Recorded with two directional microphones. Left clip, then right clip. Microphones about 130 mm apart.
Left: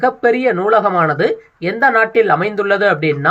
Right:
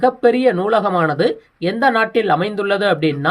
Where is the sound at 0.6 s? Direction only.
30° right (ahead or behind).